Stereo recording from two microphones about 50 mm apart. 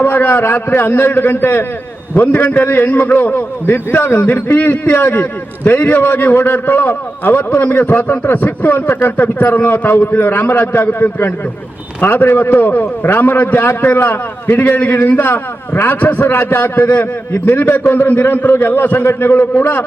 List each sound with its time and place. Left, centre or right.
0.0 s a man's voice: left